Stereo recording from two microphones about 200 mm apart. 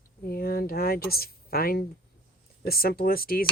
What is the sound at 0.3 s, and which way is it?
A woman's voice, 50° left (ahead or behind).